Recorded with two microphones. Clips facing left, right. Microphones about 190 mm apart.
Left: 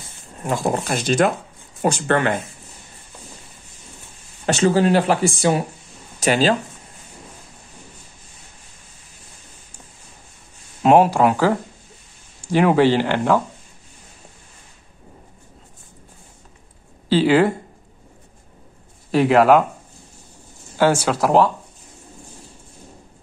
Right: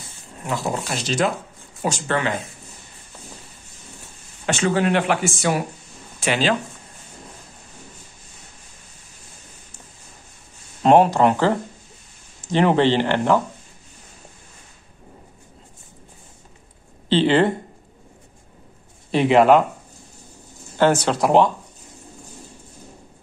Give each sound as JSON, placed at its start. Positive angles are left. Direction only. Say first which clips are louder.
{"t": 0.5, "sound": "speech", "louder": "left 4 dB", "side_deg": 50}
{"t": 4.5, "sound": "speech", "louder": "left 4 dB", "side_deg": 35}
{"t": 10.8, "sound": "speech", "louder": "left 1 dB", "side_deg": 5}
{"t": 17.1, "sound": "speech", "louder": "left 1 dB", "side_deg": 5}
{"t": 19.1, "sound": "speech", "louder": "left 1 dB", "side_deg": 0}
{"t": 20.7, "sound": "speech", "louder": "even", "side_deg": 10}